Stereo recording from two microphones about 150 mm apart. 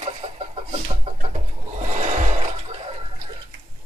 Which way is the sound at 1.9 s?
55° right (ahead or behind).